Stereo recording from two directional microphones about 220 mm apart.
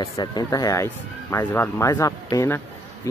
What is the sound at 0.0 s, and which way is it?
Speech, 20° left (ahead or behind).